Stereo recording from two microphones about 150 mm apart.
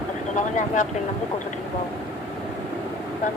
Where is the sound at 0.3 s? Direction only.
55° left (ahead or behind).